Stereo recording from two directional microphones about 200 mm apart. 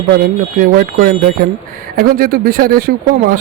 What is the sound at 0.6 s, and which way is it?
Speech, 45° right (ahead or behind).